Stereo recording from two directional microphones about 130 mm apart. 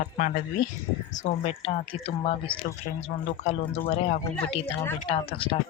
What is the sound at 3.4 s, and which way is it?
Speech, 55° left (ahead or behind).